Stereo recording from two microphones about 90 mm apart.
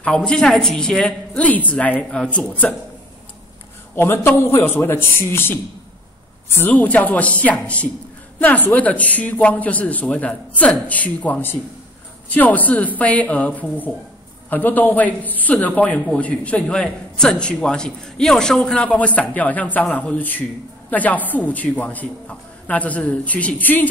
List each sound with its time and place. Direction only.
0.0 s a man's voice: 10° left (ahead or behind)
3.9 s a man's voice: 25° left (ahead or behind)